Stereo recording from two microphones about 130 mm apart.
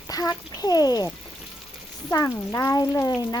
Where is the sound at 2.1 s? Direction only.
25° left (ahead or behind).